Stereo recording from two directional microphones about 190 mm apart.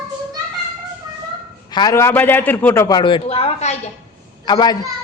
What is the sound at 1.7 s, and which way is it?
A man's voice, 20° left (ahead or behind).